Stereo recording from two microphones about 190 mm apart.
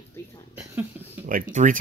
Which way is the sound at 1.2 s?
45° right (ahead or behind).